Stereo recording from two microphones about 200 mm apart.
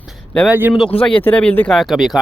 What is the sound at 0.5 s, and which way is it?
Speech, 10° right (ahead or behind).